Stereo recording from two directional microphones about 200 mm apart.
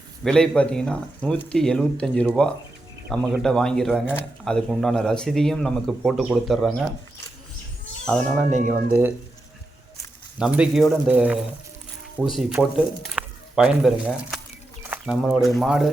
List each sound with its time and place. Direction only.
0.3 s speech: 5° left (ahead or behind)
8.0 s speech: 5° left (ahead or behind)
8.4 s speech: 40° right (ahead or behind)
10.3 s speech: 5° right (ahead or behind)
12.5 s speech: centre (ahead or behind)